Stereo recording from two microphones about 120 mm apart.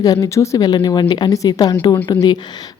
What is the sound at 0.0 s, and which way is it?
Speech, 30° left (ahead or behind).